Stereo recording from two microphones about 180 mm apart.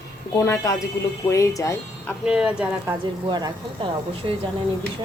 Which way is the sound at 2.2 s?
5° right (ahead or behind).